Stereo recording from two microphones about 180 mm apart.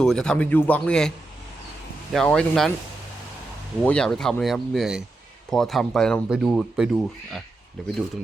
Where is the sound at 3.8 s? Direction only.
5° left (ahead or behind).